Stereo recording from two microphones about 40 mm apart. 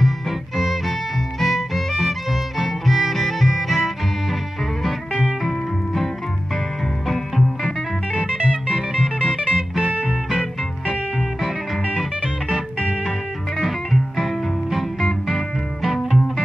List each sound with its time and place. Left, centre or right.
0.6 s music: centre
7.1 s music: centre
9.5 s music: right
13.6 s music: centre
15.9 s music: centre